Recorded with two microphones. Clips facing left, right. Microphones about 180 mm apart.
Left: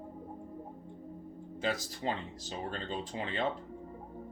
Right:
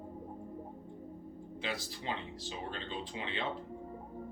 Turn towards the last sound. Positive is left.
turn(degrees=45)  # may be behind; listen again after turning